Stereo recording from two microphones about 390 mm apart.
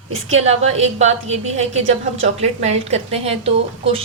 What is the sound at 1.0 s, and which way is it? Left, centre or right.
A woman's voice, centre.